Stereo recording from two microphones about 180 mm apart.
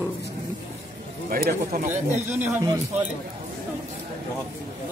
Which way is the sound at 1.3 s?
55° right (ahead or behind).